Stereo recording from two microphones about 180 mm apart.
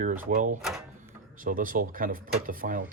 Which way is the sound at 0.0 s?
50° right (ahead or behind).